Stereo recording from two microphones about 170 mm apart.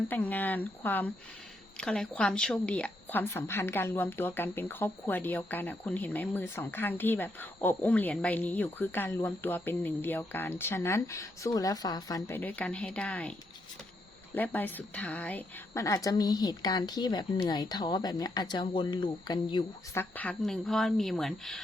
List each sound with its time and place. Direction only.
0.1 s a woman's voice: 10° left (ahead or behind)
14.3 s a woman's voice: 10° left (ahead or behind); by 20.0 s 25° left (ahead or behind)
20.0 s speech: 10° left (ahead or behind)